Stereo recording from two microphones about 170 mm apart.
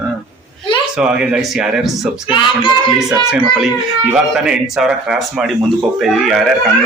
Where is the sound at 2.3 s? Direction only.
30° left (ahead or behind).